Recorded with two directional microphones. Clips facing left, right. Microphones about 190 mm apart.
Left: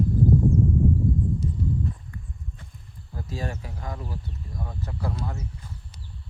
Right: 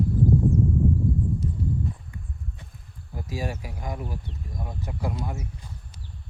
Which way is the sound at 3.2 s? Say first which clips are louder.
Right 1 dB; 10° right (ahead or behind).